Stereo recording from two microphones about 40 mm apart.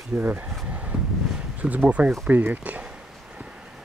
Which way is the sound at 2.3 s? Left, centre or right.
Right.